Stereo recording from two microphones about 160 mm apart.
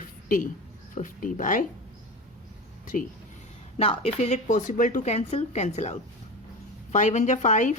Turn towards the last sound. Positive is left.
turn(degrees=50)  # may be behind; listen again after turning